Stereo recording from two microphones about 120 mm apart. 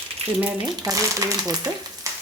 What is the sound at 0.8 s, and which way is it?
Speech, 25° right (ahead or behind).